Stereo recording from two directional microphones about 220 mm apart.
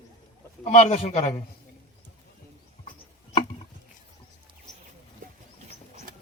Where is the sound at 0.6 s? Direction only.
30° left (ahead or behind).